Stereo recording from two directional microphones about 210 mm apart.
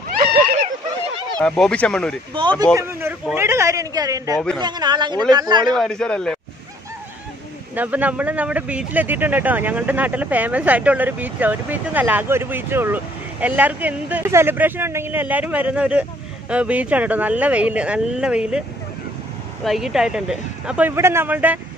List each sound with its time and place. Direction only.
1.4 s speech: 5° left (ahead or behind)
2.4 s speech: 25° right (ahead or behind)
2.7 s speech: 10° right (ahead or behind)
5.8 s speech: 5° left (ahead or behind)
7.7 s speech: 5° right (ahead or behind)
19.6 s speech: centre (ahead or behind)